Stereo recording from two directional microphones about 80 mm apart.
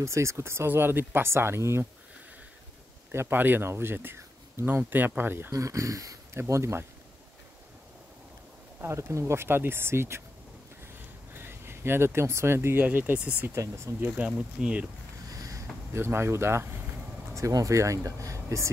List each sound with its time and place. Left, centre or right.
0.0 s speech: right
3.1 s speech: right
5.5 s speech: right
8.8 s speech: right
11.3 s speech: right
12.8 s speech: right
13.6 s speech: right
14.6 s speech: centre
15.2 s boat: right
15.9 s speech: right
17.3 s speech: right